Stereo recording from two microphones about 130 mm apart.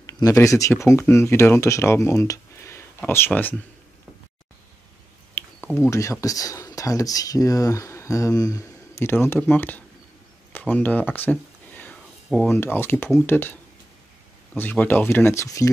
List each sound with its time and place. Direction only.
0.0 s speech: 25° left (ahead or behind)
5.4 s a sound: 15° left (ahead or behind)
5.8 s speech: 25° left (ahead or behind)
10.5 s a sound: 10° left (ahead or behind)
12.4 s speech: 15° left (ahead or behind)
14.6 s speech: 15° left (ahead or behind)